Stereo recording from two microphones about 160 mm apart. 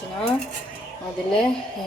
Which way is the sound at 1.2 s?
5° left (ahead or behind).